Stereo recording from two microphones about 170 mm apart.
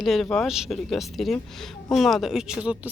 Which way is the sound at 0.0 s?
Centre (ahead or behind).